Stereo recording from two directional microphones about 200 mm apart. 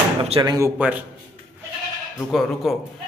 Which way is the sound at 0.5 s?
10° right (ahead or behind).